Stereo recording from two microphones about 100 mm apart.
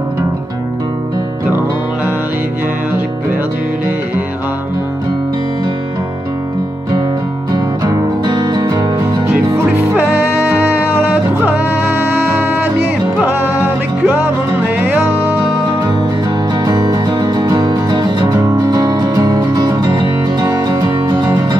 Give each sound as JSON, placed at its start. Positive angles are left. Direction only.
{"t": 7.5, "sound": "music", "side_deg": -40}
{"t": 9.8, "sound": "music", "side_deg": -20}
{"t": 16.6, "sound": "music", "side_deg": -35}